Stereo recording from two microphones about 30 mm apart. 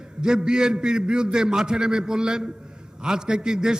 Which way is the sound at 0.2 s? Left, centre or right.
Right.